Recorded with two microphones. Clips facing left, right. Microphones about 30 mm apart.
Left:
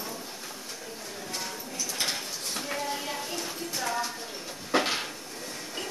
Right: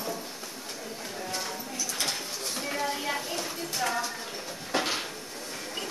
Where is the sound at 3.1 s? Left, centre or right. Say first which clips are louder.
Right 2 dB; right.